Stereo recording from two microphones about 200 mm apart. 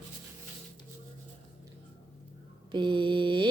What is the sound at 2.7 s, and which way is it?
Speech, 25° right (ahead or behind).